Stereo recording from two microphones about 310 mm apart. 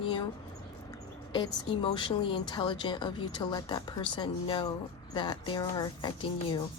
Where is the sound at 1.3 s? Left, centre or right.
Centre.